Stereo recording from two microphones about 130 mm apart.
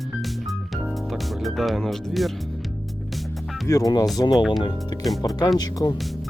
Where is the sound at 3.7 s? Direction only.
25° left (ahead or behind).